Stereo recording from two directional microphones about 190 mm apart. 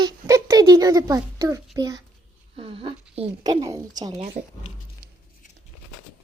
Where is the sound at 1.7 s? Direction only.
20° right (ahead or behind).